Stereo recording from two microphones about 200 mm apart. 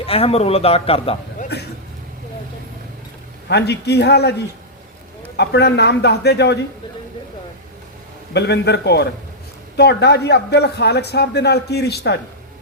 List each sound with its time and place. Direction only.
0.0 s a man's voice: 30° left (ahead or behind)
3.5 s a man's voice: 55° left (ahead or behind)
5.4 s a man's voice: 55° left (ahead or behind)
8.3 s a man's voice: 55° left (ahead or behind)